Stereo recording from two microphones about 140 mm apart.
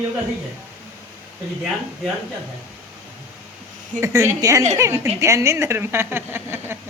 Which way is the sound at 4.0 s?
20° right (ahead or behind).